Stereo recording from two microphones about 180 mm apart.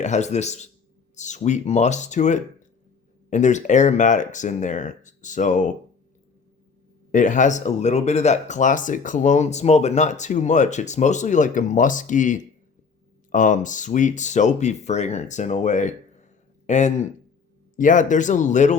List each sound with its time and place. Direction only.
0.0 s speech: 40° left (ahead or behind)
7.1 s speech: 45° left (ahead or behind)